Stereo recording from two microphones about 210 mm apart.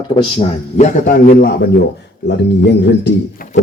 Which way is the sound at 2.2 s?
55° left (ahead or behind).